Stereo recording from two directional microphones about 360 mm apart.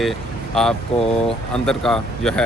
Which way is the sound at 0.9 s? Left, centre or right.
Centre.